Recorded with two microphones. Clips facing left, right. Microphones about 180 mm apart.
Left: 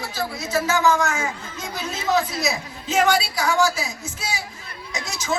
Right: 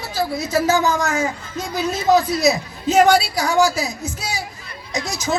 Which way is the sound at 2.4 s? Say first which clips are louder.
Right 8 dB; 40° right (ahead or behind).